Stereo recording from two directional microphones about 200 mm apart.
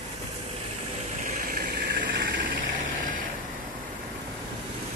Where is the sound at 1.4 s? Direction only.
45° right (ahead or behind).